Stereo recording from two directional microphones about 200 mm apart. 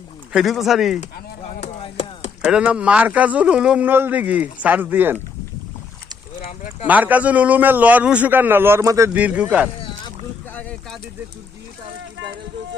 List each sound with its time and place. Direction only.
0.3 s speech: centre (ahead or behind)
1.6 s chopping: 30° left (ahead or behind)
2.4 s a man's voice: 5° right (ahead or behind)
6.5 s a sound: 40° left (ahead or behind)
6.8 s a man's voice: 10° right (ahead or behind)
10.5 s boat: 5° left (ahead or behind)